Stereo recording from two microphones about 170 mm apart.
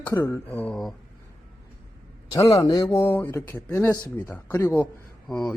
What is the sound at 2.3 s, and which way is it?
A man's voice, 20° left (ahead or behind).